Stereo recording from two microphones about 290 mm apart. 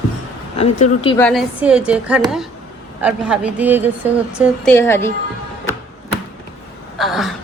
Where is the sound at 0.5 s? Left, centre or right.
Left.